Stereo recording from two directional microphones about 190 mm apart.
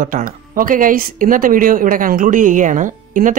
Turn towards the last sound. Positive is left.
turn(degrees=-45)  # may be behind; listen again after turning